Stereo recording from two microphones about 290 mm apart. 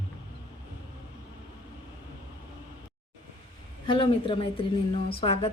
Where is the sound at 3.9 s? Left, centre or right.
Centre.